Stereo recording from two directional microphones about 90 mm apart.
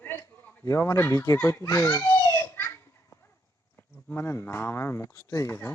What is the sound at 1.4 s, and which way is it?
Children playing, 30° left (ahead or behind).